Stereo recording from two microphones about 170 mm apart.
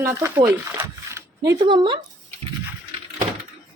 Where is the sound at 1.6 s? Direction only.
30° right (ahead or behind).